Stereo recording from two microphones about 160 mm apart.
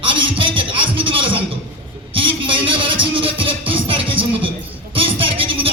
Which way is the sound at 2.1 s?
30° right (ahead or behind).